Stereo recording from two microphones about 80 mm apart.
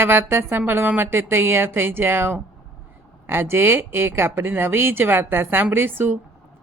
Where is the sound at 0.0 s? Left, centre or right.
Right.